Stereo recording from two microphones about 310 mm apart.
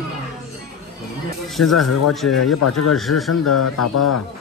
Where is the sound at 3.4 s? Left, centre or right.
Left.